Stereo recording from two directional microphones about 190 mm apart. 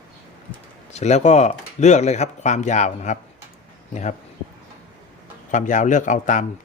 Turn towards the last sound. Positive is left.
turn(degrees=40)  # may be behind; listen again after turning